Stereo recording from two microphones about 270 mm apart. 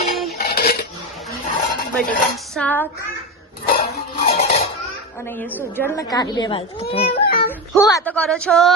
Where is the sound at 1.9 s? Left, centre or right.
Centre.